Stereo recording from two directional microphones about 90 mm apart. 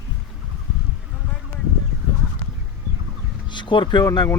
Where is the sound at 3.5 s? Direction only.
60° left (ahead or behind).